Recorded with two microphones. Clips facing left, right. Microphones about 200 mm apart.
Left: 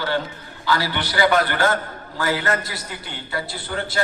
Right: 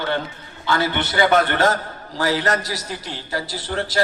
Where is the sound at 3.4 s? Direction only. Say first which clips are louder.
Right 2 dB; 90° right.